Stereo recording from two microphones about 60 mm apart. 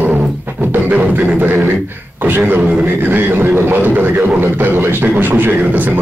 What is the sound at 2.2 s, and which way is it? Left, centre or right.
Speech, right.